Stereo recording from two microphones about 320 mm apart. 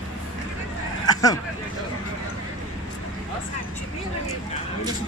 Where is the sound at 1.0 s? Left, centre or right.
Centre.